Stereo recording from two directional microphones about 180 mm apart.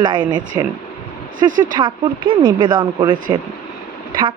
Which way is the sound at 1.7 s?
25° right (ahead or behind).